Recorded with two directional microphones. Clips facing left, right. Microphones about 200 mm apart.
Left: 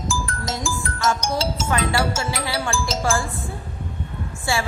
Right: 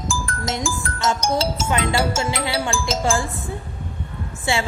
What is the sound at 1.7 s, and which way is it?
Speech, 20° right (ahead or behind).